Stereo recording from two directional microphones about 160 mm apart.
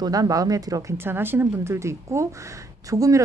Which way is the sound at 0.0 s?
25° right (ahead or behind).